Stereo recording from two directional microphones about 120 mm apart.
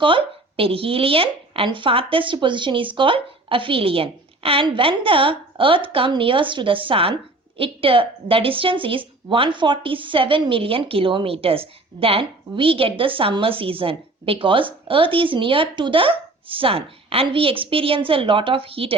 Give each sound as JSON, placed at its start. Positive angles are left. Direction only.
{"t": 0.0, "sound": "speech", "side_deg": -45}